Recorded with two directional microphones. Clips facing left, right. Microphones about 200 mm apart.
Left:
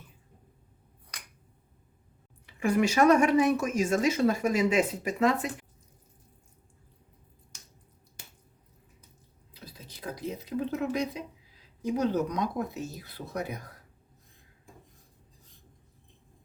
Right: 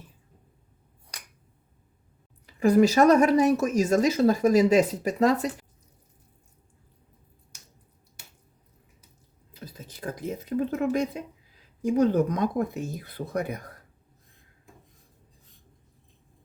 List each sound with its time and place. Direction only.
2.5 s speech: 35° right (ahead or behind)
9.5 s speech: 45° right (ahead or behind)